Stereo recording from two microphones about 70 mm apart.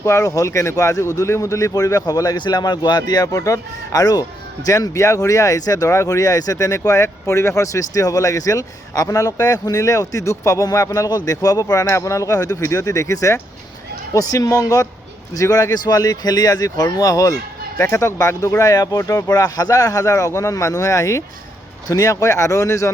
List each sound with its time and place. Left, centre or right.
0.0 s speech: left
3.3 s speech: left
4.0 s speech: left
5.9 s speech: left
14.1 s speech: left